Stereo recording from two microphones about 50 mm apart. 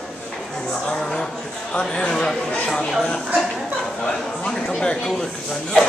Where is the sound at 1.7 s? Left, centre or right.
Centre.